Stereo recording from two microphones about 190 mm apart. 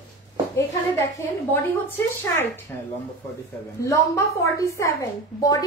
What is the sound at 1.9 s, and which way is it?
A woman's voice, 10° left (ahead or behind).